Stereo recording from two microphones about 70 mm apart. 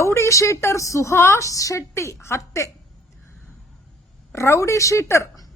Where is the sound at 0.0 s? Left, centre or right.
Left.